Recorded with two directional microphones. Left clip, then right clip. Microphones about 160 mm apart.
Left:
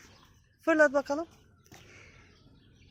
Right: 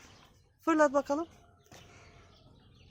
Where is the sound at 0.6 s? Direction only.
20° right (ahead or behind).